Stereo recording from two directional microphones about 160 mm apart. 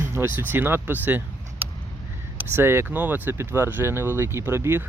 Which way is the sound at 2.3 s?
15° right (ahead or behind).